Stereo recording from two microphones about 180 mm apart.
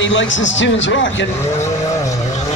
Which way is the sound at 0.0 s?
90° left.